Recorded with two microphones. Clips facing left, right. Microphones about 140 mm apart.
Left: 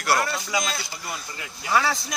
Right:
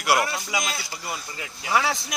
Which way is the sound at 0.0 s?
10° right (ahead or behind).